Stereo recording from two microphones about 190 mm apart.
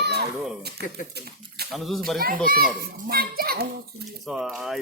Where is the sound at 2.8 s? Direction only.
55° right (ahead or behind).